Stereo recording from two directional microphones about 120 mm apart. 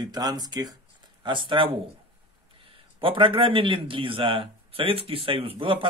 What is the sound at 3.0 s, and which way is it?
Speech, 45° right (ahead or behind).